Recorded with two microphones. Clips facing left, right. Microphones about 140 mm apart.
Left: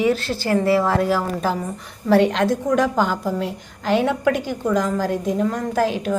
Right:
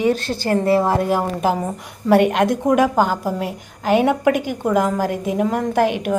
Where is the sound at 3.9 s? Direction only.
50° right (ahead or behind).